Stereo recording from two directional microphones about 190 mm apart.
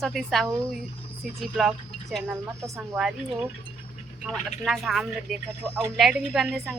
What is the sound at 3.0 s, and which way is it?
Speech, 5° right (ahead or behind).